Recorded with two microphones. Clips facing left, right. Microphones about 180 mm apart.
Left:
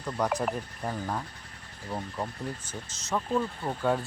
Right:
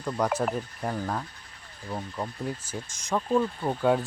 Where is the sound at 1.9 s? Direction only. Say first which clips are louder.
Right 1 dB; 5° left (ahead or behind).